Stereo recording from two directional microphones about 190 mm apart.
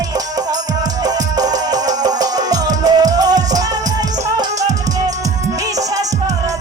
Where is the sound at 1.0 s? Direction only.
20° right (ahead or behind).